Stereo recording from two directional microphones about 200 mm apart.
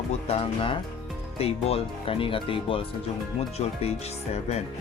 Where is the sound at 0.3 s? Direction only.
30° left (ahead or behind).